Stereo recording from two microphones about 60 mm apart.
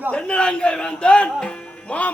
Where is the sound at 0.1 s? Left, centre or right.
Centre.